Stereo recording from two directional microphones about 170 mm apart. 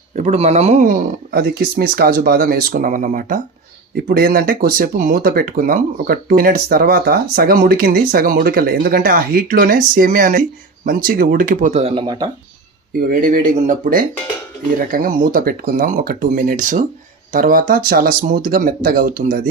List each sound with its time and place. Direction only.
0.2 s speech: 40° right (ahead or behind); by 12.3 s 25° right (ahead or behind)
13.0 s speech: 55° right (ahead or behind)